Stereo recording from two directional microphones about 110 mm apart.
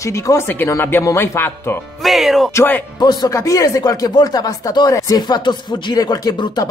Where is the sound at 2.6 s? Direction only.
15° left (ahead or behind).